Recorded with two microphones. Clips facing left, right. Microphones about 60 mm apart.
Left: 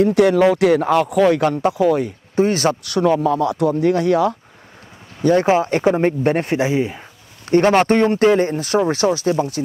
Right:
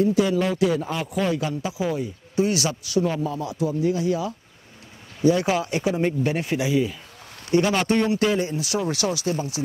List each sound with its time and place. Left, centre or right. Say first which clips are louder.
0.0 s speech: left 7 dB; left
2.3 s speech: left 6 dB; left
2.9 s speech: left 7 dB; left
5.2 s speech: left 5 dB; left